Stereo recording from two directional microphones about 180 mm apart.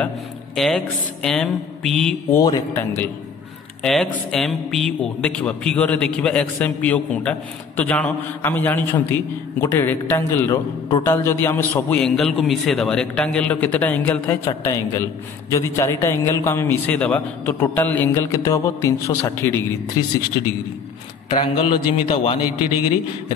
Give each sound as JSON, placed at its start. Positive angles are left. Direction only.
{"t": 0.6, "sound": "speech", "side_deg": 5}
{"t": 2.3, "sound": "a man's voice", "side_deg": 20}
{"t": 3.8, "sound": "a man's voice", "side_deg": 0}
{"t": 21.3, "sound": "a man's voice", "side_deg": 25}